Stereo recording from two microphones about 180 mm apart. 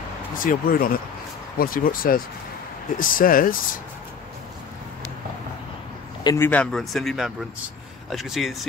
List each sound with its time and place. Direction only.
0.4 s speech: 50° left (ahead or behind)
6.2 s speech: 15° left (ahead or behind)